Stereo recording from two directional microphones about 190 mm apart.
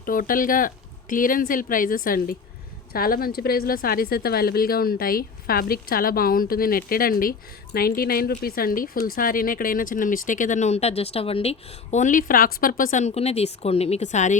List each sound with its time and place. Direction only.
0.0 s a woman's voice: 45° left (ahead or behind)